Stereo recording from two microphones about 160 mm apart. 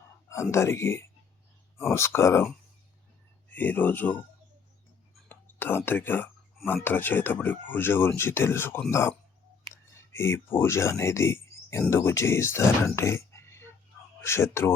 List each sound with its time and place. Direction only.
0.5 s speech: 15° left (ahead or behind)
3.5 s speech: 10° left (ahead or behind)
5.3 s speech: 10° left (ahead or behind)
13.0 s a sound: 15° left (ahead or behind)
14.2 s speech: 15° left (ahead or behind)